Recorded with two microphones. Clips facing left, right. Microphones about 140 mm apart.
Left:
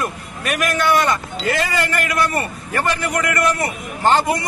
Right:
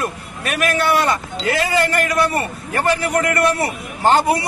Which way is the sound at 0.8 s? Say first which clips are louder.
Left 1 dB; 35° right (ahead or behind).